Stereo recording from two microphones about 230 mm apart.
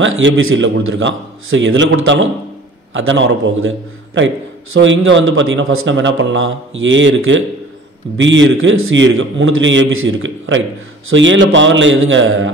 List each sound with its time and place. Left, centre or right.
0.0 s a man's voice: right